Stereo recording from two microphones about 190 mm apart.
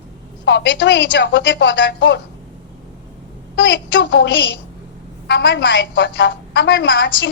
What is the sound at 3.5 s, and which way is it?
A woman's voice, 70° left (ahead or behind).